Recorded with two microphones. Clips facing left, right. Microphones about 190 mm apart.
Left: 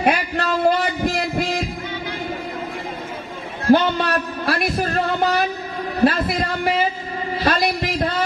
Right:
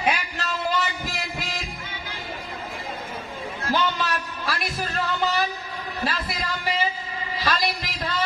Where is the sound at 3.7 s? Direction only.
55° left (ahead or behind).